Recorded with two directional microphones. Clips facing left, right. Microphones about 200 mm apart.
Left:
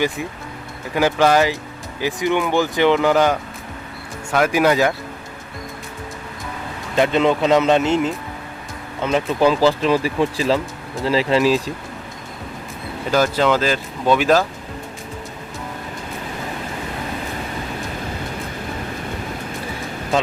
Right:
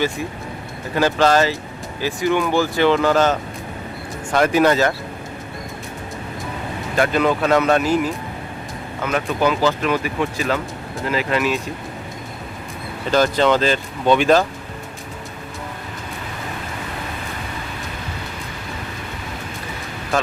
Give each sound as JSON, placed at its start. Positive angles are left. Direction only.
{"t": 0.9, "sound": "speech", "side_deg": 15}
{"t": 6.9, "sound": "speech", "side_deg": 25}
{"t": 13.1, "sound": "speech", "side_deg": 5}